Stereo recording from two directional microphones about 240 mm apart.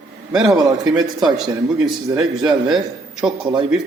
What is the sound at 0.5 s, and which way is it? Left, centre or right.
Speech, centre.